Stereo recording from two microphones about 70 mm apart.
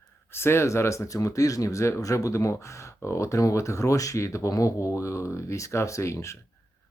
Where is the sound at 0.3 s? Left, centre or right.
Left.